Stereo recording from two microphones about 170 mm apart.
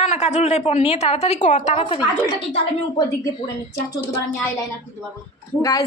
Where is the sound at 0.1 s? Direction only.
40° left (ahead or behind).